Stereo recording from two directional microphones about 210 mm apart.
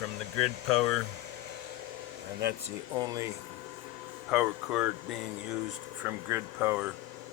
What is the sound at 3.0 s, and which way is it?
Speech, 15° right (ahead or behind).